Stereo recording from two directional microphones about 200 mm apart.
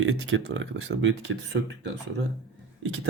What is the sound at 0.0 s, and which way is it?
Speech, 70° right (ahead or behind).